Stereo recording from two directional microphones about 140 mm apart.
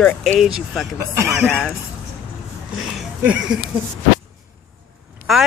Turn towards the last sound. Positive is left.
turn(degrees=90)